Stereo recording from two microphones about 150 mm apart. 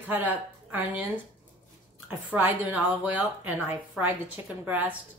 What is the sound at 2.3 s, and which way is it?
A woman's voice, 10° right (ahead or behind).